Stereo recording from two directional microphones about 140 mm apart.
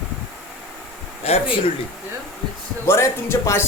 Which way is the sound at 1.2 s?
45° left (ahead or behind).